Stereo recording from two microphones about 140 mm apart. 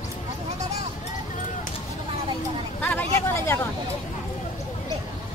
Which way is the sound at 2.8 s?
15° left (ahead or behind).